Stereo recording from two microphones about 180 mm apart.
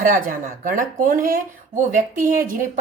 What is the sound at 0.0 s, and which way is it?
A woman's voice, 50° right (ahead or behind).